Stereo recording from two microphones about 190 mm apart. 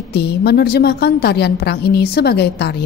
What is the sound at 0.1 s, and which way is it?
A woman's voice, 60° left (ahead or behind).